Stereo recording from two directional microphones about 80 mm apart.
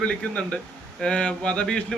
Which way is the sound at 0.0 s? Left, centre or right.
Centre.